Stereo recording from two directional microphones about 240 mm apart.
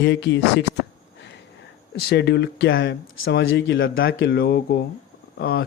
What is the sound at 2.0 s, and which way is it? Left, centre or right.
Speech, left.